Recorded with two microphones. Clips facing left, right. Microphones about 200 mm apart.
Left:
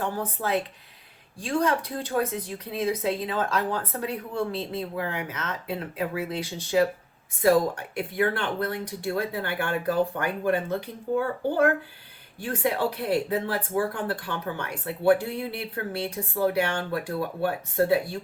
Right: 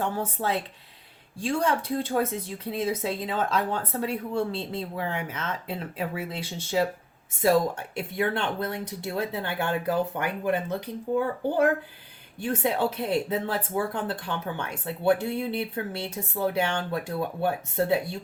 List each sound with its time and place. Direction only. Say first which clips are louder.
1.4 s speech: left 1 dB; 25° right (ahead or behind)